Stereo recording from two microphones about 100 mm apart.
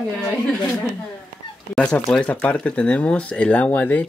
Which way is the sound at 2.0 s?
10° left (ahead or behind).